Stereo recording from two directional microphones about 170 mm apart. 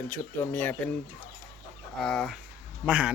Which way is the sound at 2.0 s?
5° left (ahead or behind).